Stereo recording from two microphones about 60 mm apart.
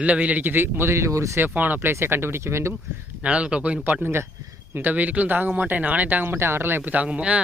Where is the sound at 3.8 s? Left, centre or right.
Right.